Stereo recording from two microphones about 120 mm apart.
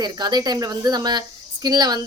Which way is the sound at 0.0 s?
35° right (ahead or behind).